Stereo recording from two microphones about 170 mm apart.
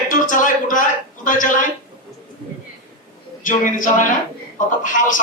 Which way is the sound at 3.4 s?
50° left (ahead or behind).